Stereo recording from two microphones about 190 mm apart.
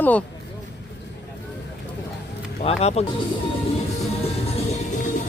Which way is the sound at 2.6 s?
35° left (ahead or behind).